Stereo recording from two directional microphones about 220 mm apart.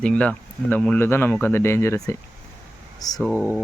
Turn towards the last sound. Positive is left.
turn(degrees=-5)  # may be behind; listen again after turning